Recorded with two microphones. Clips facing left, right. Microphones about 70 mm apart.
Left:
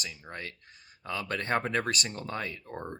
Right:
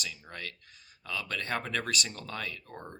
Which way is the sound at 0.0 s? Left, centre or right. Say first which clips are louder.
Left 1 dB; left.